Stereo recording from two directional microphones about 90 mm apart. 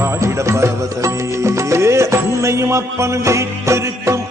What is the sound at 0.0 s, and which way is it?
Music, 30° right (ahead or behind).